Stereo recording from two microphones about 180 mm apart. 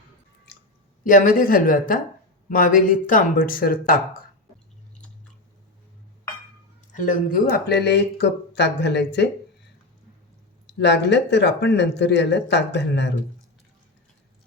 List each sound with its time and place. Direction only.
1.0 s speech: 50° left (ahead or behind)
6.9 s speech: 45° left (ahead or behind); by 9.3 s 70° left (ahead or behind)
10.7 s speech: 70° left (ahead or behind)